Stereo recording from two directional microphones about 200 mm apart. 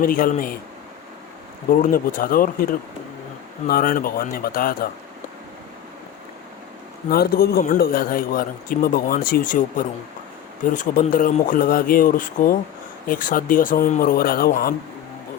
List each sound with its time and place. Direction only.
0.0 s a man's voice: 45° left (ahead or behind)
1.7 s a man's voice: 45° left (ahead or behind)
3.7 s a man's voice: 45° left (ahead or behind)
7.1 s a man's voice: 50° left (ahead or behind)